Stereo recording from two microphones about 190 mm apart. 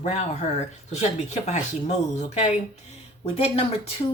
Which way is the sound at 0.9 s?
35° left (ahead or behind).